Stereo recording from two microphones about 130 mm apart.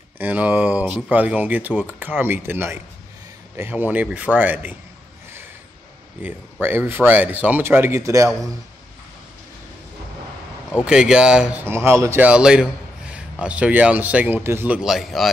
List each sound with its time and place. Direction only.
0.2 s speech: 10° right (ahead or behind)
6.2 s speech: 15° right (ahead or behind)
10.9 s speech: 5° right (ahead or behind)
11.6 s speech: 20° right (ahead or behind)
12.3 s a man's voice: 5° right (ahead or behind)
14.8 s a man's voice: 5° right (ahead or behind)